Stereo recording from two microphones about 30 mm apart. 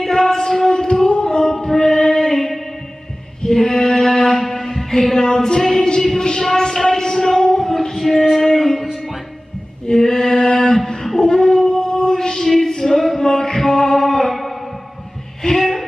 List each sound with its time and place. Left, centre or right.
0.1 s music: centre
1.0 s music: left; by 5.0 s centre
5.0 s female singing: centre
5.9 s music: left
7.7 s music: centre
8.9 s music: centre
9.8 s female singing: left
11.1 s dog: left
12.5 s chant: centre
14.3 s a sound: centre